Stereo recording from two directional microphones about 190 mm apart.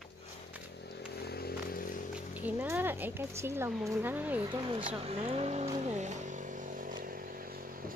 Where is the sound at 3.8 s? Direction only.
15° right (ahead or behind).